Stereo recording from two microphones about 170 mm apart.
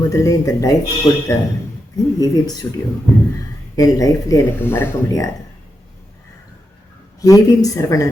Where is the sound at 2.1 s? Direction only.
20° left (ahead or behind).